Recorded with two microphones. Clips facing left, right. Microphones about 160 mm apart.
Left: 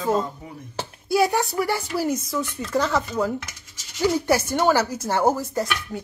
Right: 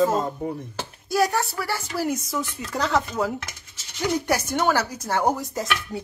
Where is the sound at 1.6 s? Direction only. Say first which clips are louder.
Left 4 dB; 15° left (ahead or behind).